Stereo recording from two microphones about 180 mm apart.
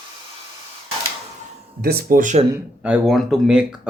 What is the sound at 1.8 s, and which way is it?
Speech, 55° right (ahead or behind).